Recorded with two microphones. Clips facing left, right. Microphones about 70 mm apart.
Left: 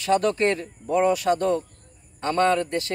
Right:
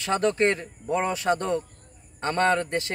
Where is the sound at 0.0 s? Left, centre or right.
Right.